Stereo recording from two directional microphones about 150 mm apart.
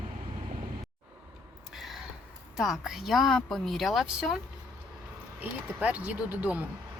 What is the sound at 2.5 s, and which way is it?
Speech, centre (ahead or behind).